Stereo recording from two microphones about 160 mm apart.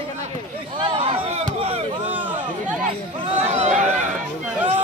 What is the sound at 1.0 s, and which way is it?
Chop, 45° right (ahead or behind).